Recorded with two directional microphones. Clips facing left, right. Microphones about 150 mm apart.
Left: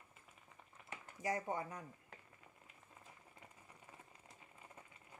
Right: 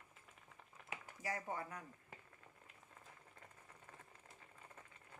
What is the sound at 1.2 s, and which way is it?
Speech, 20° left (ahead or behind).